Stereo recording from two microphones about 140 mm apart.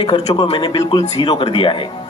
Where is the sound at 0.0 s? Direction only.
35° left (ahead or behind).